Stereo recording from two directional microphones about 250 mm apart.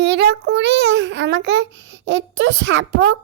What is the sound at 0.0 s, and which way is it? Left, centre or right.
A child's voice, right.